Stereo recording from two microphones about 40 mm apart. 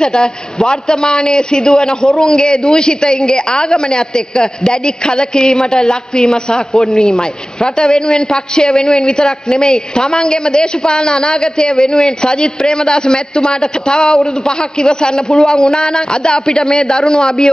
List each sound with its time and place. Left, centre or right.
0.0 s a man's voice: left
7.6 s a man's voice: centre
9.0 s a man's voice: left
15.3 s a woman's voice: centre